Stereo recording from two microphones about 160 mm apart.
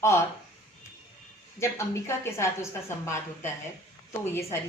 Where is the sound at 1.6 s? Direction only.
15° left (ahead or behind).